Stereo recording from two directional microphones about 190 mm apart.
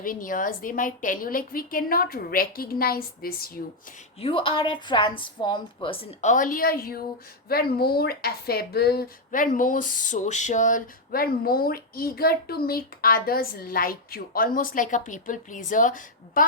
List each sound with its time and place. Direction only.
0.0 s speech: 45° left (ahead or behind)
4.2 s a woman's voice: 30° left (ahead or behind); by 16.4 s 45° left (ahead or behind)